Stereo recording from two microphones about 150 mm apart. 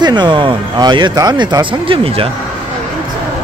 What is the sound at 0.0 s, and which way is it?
Speech, 30° right (ahead or behind).